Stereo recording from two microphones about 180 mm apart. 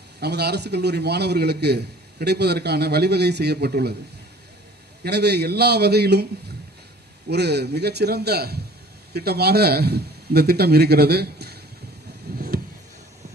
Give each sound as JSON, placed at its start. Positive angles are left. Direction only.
{"t": 0.2, "sound": "a man's voice", "side_deg": -65}
{"t": 5.0, "sound": "a man's voice", "side_deg": -65}
{"t": 7.3, "sound": "a man's voice", "side_deg": -65}
{"t": 12.3, "sound": "a sound", "side_deg": -60}